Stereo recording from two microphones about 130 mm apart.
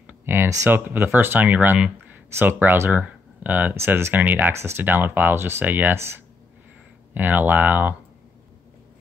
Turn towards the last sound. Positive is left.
turn(degrees=-15)  # may be behind; listen again after turning